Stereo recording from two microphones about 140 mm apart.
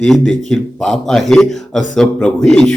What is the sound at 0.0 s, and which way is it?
A man's voice, centre (ahead or behind).